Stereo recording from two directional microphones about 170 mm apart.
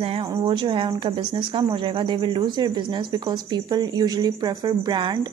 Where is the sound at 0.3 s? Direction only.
30° right (ahead or behind).